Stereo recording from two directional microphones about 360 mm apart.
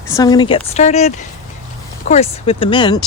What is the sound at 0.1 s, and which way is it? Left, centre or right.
Speech, centre.